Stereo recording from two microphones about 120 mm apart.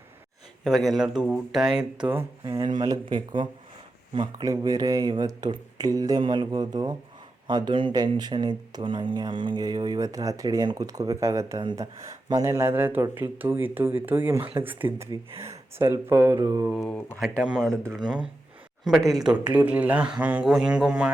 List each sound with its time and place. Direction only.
0.6 s a man's voice: centre (ahead or behind)
2.4 s speech: 40° right (ahead or behind)
17.4 s a man's voice: 5° right (ahead or behind)
19.5 s speech: 15° right (ahead or behind)